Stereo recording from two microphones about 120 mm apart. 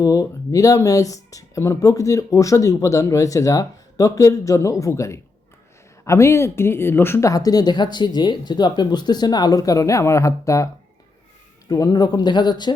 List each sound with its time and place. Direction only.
0.0 s speech: 30° left (ahead or behind)
11.7 s speech: 30° left (ahead or behind)